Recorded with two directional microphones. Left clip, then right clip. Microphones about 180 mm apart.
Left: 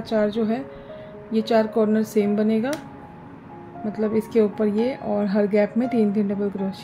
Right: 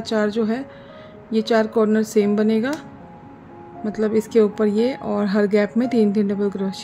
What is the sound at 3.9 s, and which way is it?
A woman's voice, 20° right (ahead or behind).